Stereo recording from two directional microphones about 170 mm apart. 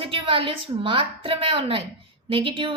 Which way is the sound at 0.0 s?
35° right (ahead or behind).